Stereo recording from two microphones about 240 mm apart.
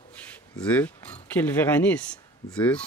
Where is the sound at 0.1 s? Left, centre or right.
Centre.